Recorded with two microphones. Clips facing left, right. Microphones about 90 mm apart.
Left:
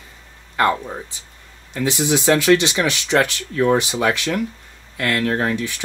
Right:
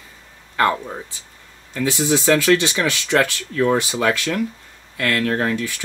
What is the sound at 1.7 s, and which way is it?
Speech, 20° left (ahead or behind).